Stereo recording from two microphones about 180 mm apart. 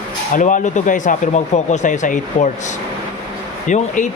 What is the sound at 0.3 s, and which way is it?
Speech, 45° left (ahead or behind).